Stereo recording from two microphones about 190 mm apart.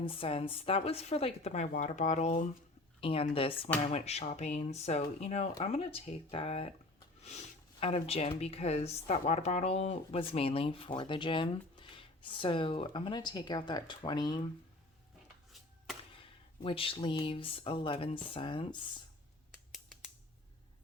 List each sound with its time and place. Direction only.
0.0 s speech: 30° left (ahead or behind)
16.6 s speech: 30° left (ahead or behind)
19.7 s scissors: centre (ahead or behind)